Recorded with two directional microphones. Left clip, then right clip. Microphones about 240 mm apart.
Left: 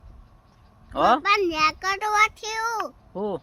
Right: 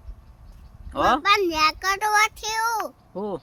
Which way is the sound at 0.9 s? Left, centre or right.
Centre.